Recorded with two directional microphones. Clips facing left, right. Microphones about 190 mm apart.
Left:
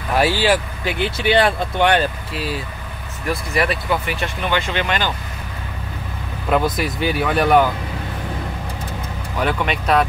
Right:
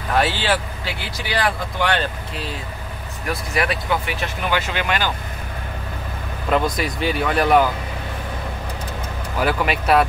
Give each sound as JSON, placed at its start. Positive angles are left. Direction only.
{"t": 0.2, "sound": "speech", "side_deg": 10}
{"t": 2.0, "sound": "speech", "side_deg": 5}
{"t": 6.5, "sound": "speech", "side_deg": 0}
{"t": 9.4, "sound": "speech", "side_deg": -5}